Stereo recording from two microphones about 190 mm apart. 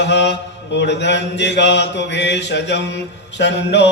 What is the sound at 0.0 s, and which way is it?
Mantra, 65° left (ahead or behind).